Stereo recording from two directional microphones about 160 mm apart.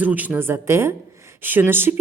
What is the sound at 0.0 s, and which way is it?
Speech, 10° right (ahead or behind).